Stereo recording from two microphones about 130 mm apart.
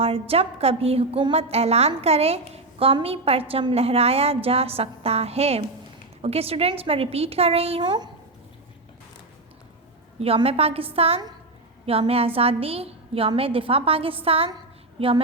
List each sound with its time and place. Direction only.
0.0 s a woman's voice: 45° right (ahead or behind)
10.2 s a woman's voice: 50° right (ahead or behind)